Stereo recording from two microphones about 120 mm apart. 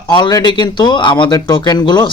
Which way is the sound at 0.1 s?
35° left (ahead or behind).